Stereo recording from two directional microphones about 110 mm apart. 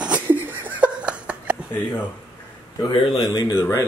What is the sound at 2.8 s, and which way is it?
Speech, 40° left (ahead or behind).